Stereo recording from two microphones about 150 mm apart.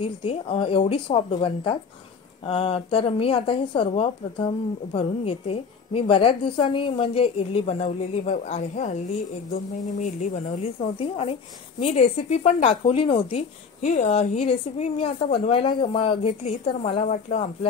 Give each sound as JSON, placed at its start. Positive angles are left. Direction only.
{"t": 0.0, "sound": "a woman's voice", "side_deg": 40}
{"t": 13.8, "sound": "a woman's voice", "side_deg": 50}